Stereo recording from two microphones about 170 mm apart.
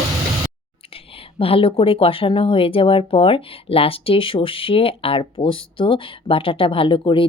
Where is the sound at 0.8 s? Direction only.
35° left (ahead or behind).